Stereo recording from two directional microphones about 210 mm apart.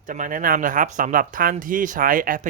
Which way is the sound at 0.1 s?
40° right (ahead or behind).